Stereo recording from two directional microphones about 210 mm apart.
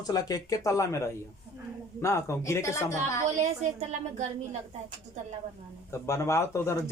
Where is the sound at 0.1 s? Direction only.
15° left (ahead or behind).